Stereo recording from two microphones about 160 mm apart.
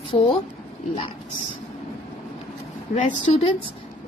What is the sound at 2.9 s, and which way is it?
Speech, 45° left (ahead or behind).